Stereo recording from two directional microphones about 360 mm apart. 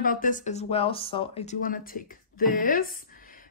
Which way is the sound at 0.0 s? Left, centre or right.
Left.